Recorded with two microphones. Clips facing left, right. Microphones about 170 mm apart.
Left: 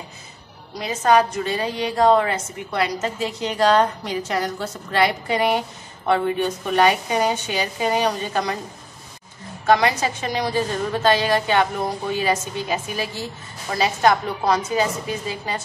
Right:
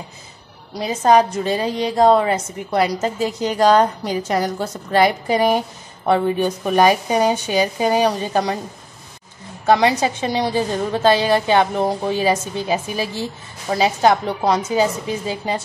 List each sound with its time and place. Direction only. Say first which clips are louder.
0.7 s a woman's voice: right 3 dB; 35° right (ahead or behind)
9.7 s a woman's voice: right 3 dB; 30° right (ahead or behind)